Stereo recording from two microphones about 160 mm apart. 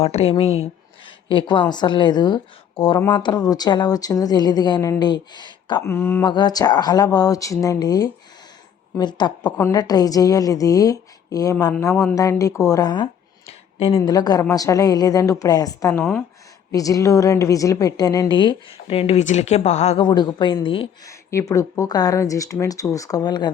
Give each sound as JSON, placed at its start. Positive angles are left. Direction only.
{"t": 0.0, "sound": "a woman's voice", "side_deg": 40}
{"t": 5.8, "sound": "speech", "side_deg": 15}
{"t": 6.2, "sound": "a woman's voice", "side_deg": 25}
{"t": 13.5, "sound": "a sound", "side_deg": 35}
{"t": 14.1, "sound": "a woman's voice", "side_deg": 25}
{"t": 20.0, "sound": "a woman's voice", "side_deg": 30}
{"t": 21.1, "sound": "a sound", "side_deg": 20}
{"t": 21.5, "sound": "a woman's voice", "side_deg": 20}